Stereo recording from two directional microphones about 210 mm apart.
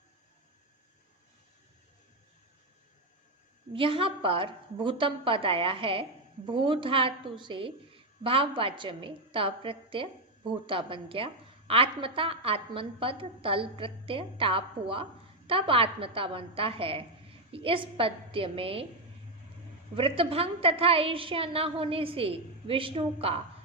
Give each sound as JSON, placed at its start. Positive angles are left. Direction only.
{"t": 3.7, "sound": "a woman's voice", "side_deg": -25}
{"t": 20.0, "sound": "a woman's voice", "side_deg": -25}